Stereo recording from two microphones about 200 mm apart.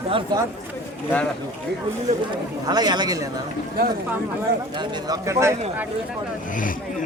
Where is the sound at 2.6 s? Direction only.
20° right (ahead or behind).